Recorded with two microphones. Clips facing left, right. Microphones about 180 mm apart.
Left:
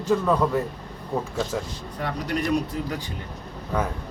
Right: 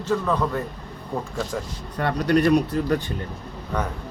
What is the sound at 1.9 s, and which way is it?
Speech, 65° right (ahead or behind).